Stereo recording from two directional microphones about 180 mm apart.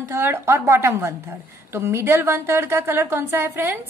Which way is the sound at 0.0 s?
15° right (ahead or behind).